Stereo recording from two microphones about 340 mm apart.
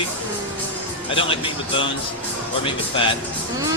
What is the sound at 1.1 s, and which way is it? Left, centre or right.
Speech, centre.